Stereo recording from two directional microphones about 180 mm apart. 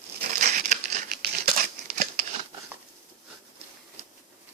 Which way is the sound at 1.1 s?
60° right (ahead or behind).